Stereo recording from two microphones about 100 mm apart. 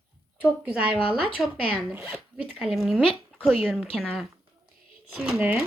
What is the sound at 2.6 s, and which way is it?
Speech, centre (ahead or behind).